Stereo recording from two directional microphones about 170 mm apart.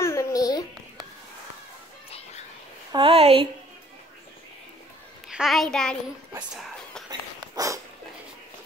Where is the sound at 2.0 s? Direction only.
35° left (ahead or behind).